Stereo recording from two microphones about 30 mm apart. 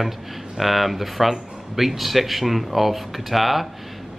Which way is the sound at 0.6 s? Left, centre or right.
Centre.